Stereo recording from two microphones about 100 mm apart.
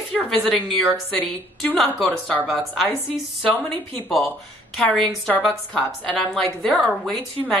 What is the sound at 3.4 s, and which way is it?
Speech, 15° left (ahead or behind).